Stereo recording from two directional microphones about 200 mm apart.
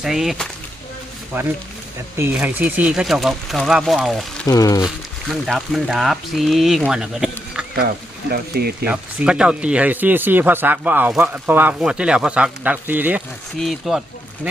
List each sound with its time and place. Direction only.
0.0 s speech: centre (ahead or behind)
2.1 s speech: 10° right (ahead or behind)
4.4 s speech: 20° left (ahead or behind)
5.3 s speech: centre (ahead or behind)
8.3 s speech: 50° right (ahead or behind)
8.8 s speech: 5° right (ahead or behind)